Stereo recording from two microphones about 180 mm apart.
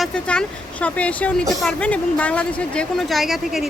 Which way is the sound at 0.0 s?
5° left (ahead or behind).